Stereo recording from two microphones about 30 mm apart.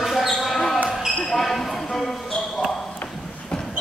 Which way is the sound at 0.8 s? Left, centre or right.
Centre.